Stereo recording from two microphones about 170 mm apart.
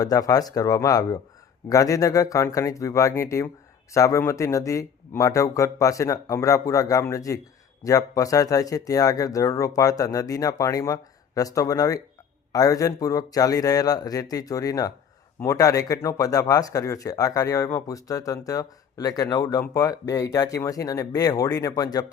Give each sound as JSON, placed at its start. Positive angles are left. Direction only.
{"t": 0.0, "sound": "speech", "side_deg": 20}